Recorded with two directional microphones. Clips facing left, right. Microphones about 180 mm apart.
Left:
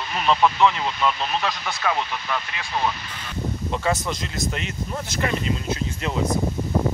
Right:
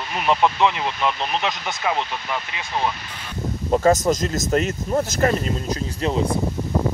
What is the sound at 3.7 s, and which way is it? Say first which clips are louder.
Speech: right 9 dB; 40° right (ahead or behind).